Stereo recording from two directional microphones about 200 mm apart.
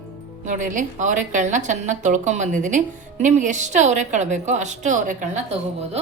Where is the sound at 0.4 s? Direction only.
40° right (ahead or behind).